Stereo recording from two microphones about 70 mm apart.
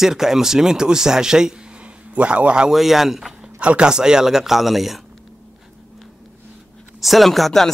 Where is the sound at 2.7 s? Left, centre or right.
Centre.